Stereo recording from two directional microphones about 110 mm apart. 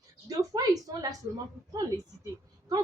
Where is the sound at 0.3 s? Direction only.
35° right (ahead or behind).